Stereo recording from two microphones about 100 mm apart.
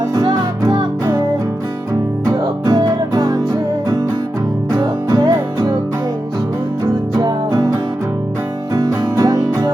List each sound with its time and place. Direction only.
0.1 s music: 40° right (ahead or behind)
2.6 s music: 40° right (ahead or behind)
4.7 s music: 40° right (ahead or behind)
7.2 s music: 35° right (ahead or behind)